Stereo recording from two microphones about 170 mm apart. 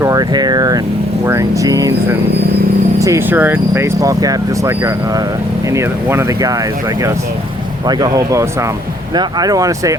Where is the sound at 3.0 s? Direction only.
15° right (ahead or behind).